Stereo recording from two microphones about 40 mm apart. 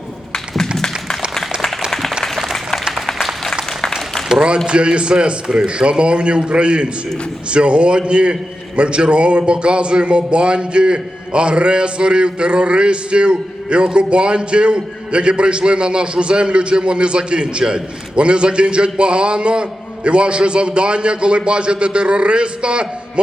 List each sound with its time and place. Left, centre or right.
0.3 s tap: centre
1.9 s applause: centre
4.4 s a man's voice: right